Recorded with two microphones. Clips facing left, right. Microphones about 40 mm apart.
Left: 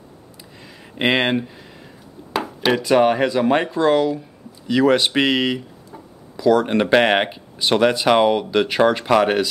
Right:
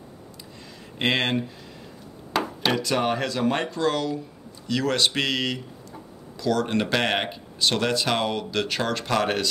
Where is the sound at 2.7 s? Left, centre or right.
Centre.